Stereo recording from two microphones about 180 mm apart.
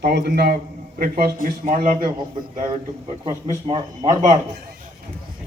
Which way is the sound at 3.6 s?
25° right (ahead or behind).